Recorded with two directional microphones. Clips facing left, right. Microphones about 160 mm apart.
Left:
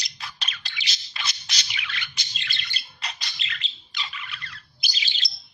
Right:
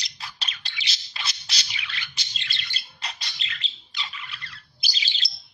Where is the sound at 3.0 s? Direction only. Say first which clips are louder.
Even; 30° right (ahead or behind).